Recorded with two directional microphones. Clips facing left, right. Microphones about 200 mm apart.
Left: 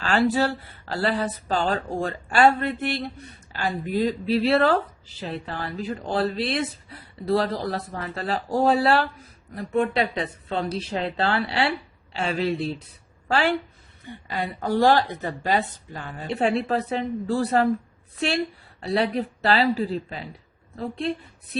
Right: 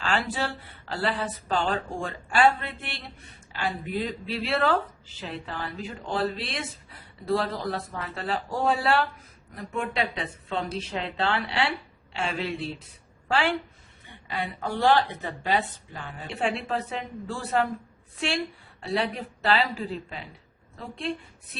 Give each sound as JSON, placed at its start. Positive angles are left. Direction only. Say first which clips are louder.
{"t": 0.0, "sound": "a woman's voice", "louder": "left 7 dB", "side_deg": 40}